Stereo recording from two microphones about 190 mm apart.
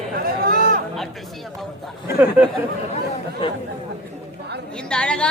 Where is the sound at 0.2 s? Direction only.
50° right (ahead or behind).